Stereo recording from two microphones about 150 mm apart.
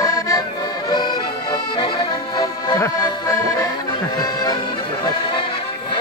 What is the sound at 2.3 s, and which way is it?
Accordion, 25° left (ahead or behind).